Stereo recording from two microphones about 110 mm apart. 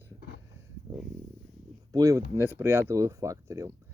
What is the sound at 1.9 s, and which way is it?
Speech, 30° right (ahead or behind).